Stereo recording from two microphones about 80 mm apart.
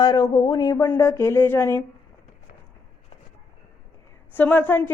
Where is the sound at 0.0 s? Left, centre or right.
Left.